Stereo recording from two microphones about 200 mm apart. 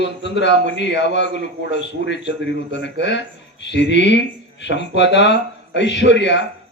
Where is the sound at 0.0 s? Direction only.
60° left (ahead or behind).